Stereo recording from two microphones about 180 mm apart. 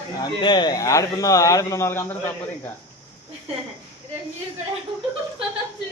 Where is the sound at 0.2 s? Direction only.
25° left (ahead or behind).